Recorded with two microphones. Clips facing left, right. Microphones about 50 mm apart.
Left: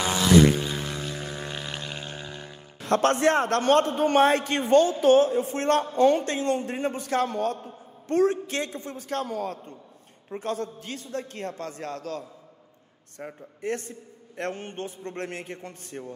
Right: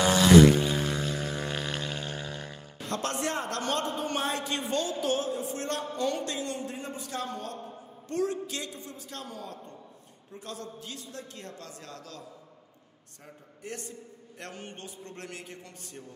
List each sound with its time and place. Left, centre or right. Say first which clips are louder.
0.7 s vehicle: right 2 dB; centre
2.8 s a man's voice: left 10 dB; left
5.9 s a man's voice: left 8 dB; left
10.3 s a man's voice: left 10 dB; left